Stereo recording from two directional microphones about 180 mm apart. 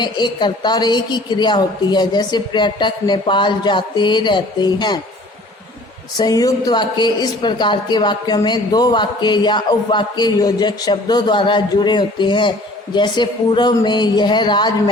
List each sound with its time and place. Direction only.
0.0 s speech: 25° left (ahead or behind)
6.1 s speech: 20° left (ahead or behind)